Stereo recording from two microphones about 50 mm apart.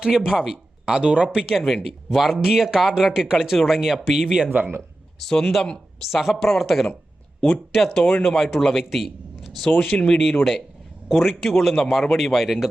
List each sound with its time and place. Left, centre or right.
0.0 s speech: centre
4.4 s speech: right
5.2 s speech: centre
7.9 s speech: centre
11.1 s speech: centre